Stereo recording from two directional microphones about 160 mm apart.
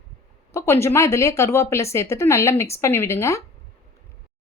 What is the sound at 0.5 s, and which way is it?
A woman's voice, 15° left (ahead or behind).